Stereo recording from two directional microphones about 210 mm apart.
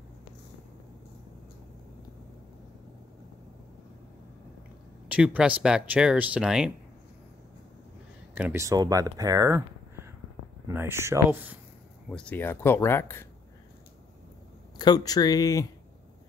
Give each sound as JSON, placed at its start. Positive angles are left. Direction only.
{"t": 5.0, "sound": "speech", "side_deg": -5}
{"t": 8.4, "sound": "speech", "side_deg": -10}
{"t": 10.7, "sound": "speech", "side_deg": -10}
{"t": 12.1, "sound": "speech", "side_deg": 5}
{"t": 14.8, "sound": "speech", "side_deg": 20}